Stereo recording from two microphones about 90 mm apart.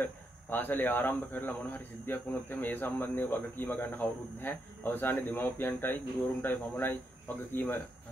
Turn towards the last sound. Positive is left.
turn(degrees=25)  # may be behind; listen again after turning